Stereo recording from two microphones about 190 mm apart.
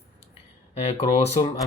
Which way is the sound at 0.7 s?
35° left (ahead or behind).